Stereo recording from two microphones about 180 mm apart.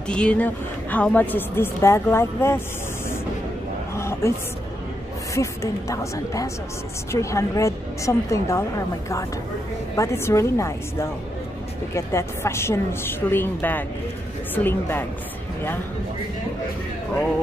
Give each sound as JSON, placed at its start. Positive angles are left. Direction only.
{"t": 0.1, "sound": "a woman's voice", "side_deg": 5}
{"t": 3.9, "sound": "a sound", "side_deg": 15}
{"t": 5.3, "sound": "a woman's voice", "side_deg": 15}